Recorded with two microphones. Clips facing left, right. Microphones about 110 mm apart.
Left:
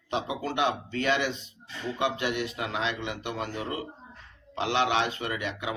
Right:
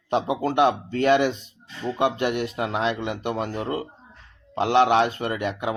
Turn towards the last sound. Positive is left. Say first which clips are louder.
# right 6 dB
turn(degrees=-50)  # may be behind; listen again after turning